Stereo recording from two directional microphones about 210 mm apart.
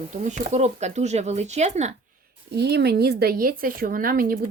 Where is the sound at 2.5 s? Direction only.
50° right (ahead or behind).